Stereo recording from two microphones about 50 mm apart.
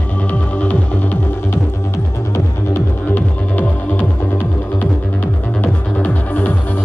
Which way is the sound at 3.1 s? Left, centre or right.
Left.